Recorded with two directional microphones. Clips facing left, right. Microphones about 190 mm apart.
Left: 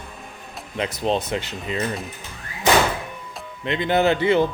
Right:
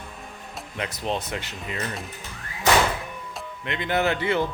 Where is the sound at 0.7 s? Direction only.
30° left (ahead or behind).